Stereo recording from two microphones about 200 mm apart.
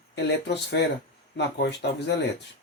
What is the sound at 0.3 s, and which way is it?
Speech, 60° left (ahead or behind).